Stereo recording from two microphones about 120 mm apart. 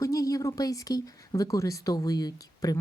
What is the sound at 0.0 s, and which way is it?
A woman's voice, 30° left (ahead or behind).